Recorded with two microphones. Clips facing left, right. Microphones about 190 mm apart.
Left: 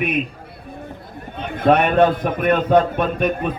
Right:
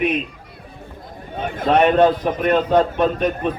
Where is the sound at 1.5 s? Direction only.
55° left (ahead or behind).